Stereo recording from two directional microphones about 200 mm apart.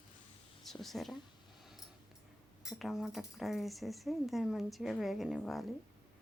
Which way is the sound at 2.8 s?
Centre (ahead or behind).